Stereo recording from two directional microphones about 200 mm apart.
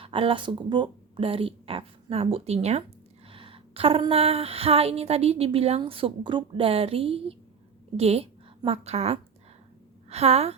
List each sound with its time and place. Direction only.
0.0 s speech: 25° right (ahead or behind)
3.2 s a sound: 25° right (ahead or behind)
7.9 s a woman's voice: 30° right (ahead or behind)